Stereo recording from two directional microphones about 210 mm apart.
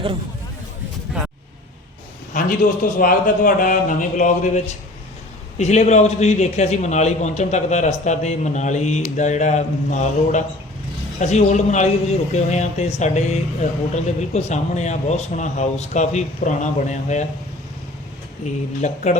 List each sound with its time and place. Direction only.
2.3 s speech: 35° left (ahead or behind)
18.8 s speech: 35° left (ahead or behind)